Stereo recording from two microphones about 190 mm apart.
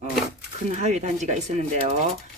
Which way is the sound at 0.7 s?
35° right (ahead or behind).